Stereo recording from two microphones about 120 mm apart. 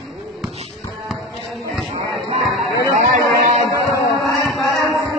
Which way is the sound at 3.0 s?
85° right.